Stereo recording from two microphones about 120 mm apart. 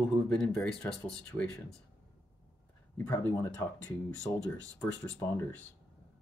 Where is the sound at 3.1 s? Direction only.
20° left (ahead or behind).